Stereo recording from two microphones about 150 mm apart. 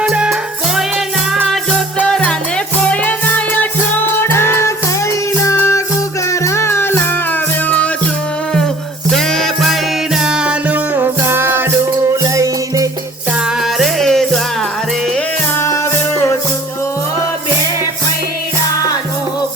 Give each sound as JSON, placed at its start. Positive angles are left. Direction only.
{"t": 0.0, "sound": "music", "side_deg": -5}
{"t": 9.1, "sound": "music", "side_deg": 5}
{"t": 13.6, "sound": "music", "side_deg": 0}
{"t": 15.5, "sound": "music", "side_deg": 15}